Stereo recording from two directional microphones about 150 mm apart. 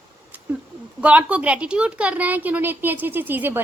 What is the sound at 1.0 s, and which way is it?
A woman's voice, 10° right (ahead or behind).